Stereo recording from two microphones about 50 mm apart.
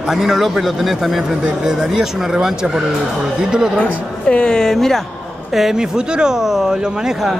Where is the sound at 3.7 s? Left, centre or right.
Left.